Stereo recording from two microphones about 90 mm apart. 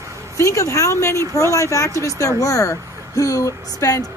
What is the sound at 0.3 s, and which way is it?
A woman's voice, 35° left (ahead or behind).